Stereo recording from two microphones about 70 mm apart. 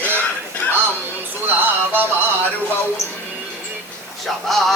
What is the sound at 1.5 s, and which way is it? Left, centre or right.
Music, right.